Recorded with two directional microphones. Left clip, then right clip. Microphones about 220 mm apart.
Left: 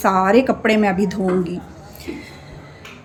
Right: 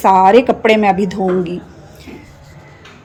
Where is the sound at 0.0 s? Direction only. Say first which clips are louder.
Right 7 dB; centre (ahead or behind).